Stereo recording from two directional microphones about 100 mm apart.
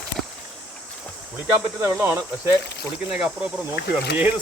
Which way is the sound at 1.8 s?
25° right (ahead or behind).